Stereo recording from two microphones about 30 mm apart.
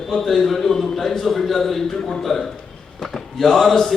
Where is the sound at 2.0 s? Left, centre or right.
Left.